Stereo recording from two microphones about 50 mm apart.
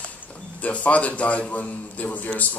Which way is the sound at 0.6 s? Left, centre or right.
Left.